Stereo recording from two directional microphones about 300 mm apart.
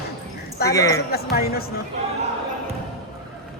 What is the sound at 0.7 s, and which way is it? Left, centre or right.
Speech, centre.